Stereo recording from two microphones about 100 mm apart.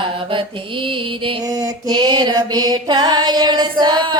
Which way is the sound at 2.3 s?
40° right (ahead or behind).